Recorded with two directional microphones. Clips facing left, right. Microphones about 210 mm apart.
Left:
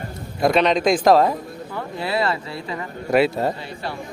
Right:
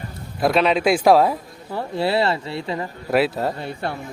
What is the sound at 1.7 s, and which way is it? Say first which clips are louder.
Speech: right 4 dB; 30° right (ahead or behind).